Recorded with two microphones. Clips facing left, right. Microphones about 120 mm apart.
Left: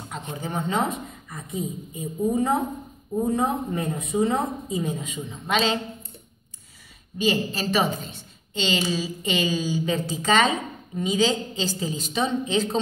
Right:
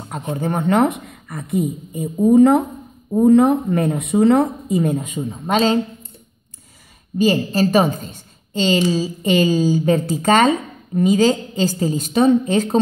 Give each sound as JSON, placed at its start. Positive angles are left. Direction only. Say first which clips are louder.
{"t": 0.1, "sound": "speech", "louder": "right 9 dB", "side_deg": -50}
{"t": 7.2, "sound": "a woman's voice", "louder": "right 8 dB", "side_deg": -45}